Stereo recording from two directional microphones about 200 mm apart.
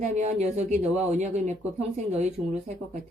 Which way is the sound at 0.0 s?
35° right (ahead or behind).